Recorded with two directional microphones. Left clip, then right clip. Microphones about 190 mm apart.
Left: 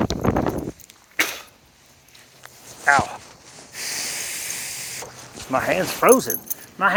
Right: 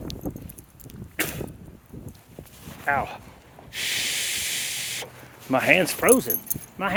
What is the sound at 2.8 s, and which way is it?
Speech, 20° right (ahead or behind).